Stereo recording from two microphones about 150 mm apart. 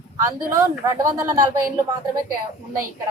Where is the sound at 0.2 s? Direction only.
20° right (ahead or behind).